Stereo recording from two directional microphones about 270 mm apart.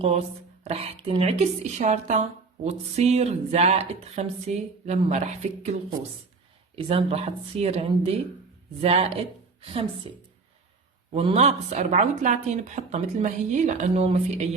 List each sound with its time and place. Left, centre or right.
0.0 s speech: right
6.7 s a woman's voice: right
11.1 s speech: right